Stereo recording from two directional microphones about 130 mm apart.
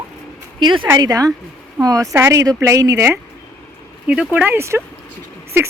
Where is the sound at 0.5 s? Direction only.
35° right (ahead or behind); by 3.2 s 20° right (ahead or behind).